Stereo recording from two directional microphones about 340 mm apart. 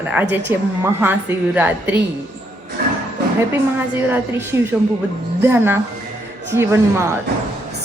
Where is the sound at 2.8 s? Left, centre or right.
Right.